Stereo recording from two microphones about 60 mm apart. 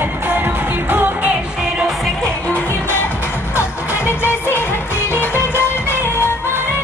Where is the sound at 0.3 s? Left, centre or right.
Right.